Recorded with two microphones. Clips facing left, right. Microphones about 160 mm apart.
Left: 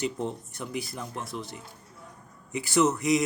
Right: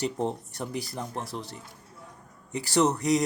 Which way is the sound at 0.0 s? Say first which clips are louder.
Right 2 dB; 35° right (ahead or behind).